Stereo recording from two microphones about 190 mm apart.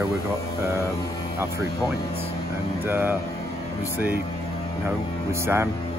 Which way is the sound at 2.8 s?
10° right (ahead or behind).